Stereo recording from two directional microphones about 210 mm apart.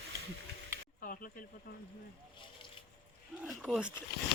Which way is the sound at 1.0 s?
40° left (ahead or behind).